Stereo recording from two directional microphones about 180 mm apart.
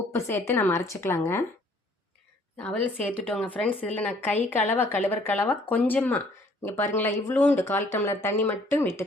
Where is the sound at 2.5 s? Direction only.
10° left (ahead or behind).